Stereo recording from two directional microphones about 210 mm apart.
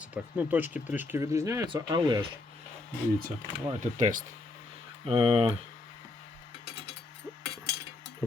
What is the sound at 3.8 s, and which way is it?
Speech, 40° right (ahead or behind).